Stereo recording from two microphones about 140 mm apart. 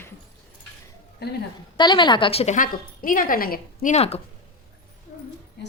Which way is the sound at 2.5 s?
80° left.